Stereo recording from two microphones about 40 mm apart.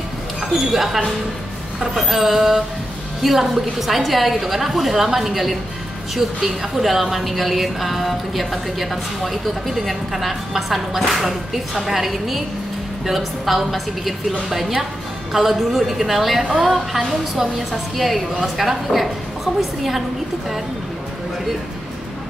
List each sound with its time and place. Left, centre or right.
0.7 s a woman's voice: centre